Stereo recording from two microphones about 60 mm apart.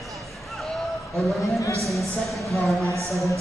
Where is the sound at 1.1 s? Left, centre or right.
Centre.